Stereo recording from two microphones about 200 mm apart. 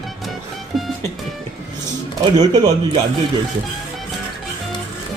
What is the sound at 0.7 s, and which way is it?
Music, centre (ahead or behind).